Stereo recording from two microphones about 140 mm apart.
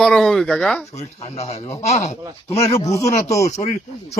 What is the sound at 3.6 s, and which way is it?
Speech, 55° left (ahead or behind).